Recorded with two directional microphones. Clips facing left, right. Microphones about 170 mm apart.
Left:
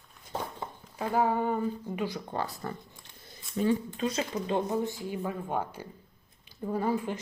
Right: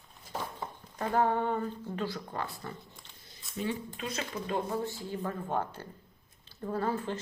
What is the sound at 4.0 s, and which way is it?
Speech, 30° left (ahead or behind).